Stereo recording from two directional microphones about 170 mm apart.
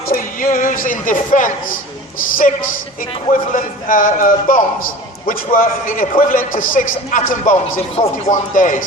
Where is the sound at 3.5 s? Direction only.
55° left (ahead or behind).